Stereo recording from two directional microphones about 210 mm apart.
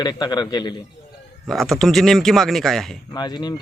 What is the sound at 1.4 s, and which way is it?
Speech, centre (ahead or behind).